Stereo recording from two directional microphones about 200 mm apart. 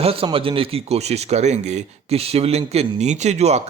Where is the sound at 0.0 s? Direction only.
30° right (ahead or behind).